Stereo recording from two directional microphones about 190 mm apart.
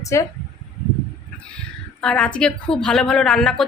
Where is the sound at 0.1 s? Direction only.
15° left (ahead or behind).